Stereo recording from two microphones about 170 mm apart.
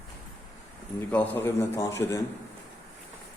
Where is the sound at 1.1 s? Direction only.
10° left (ahead or behind).